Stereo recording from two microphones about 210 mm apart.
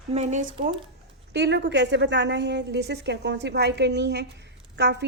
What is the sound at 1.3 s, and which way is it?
A woman's voice, 55° right (ahead or behind).